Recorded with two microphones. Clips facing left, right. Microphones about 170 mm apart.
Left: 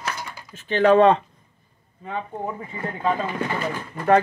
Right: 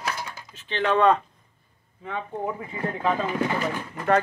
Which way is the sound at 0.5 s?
45° left (ahead or behind).